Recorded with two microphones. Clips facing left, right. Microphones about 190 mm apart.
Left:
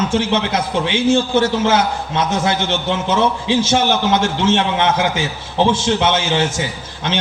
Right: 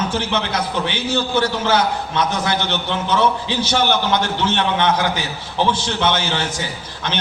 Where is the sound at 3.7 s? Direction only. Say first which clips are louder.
Right 1 dB; 25° left (ahead or behind).